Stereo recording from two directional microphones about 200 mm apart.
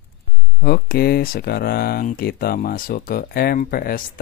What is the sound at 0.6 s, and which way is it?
Speech, 55° left (ahead or behind).